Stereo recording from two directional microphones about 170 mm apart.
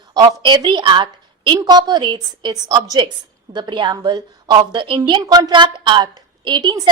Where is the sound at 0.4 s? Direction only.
25° right (ahead or behind).